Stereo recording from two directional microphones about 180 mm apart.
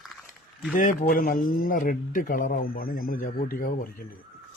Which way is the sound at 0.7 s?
50° left (ahead or behind).